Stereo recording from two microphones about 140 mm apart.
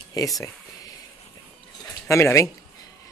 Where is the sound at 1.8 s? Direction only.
20° left (ahead or behind).